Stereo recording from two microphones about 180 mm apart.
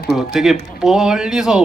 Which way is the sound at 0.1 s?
Centre (ahead or behind).